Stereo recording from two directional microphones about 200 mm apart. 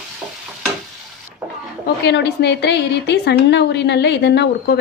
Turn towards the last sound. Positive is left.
turn(degrees=60)  # may be behind; listen again after turning